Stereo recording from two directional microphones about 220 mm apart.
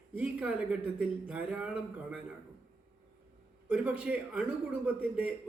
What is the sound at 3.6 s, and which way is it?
Speech, 10° right (ahead or behind).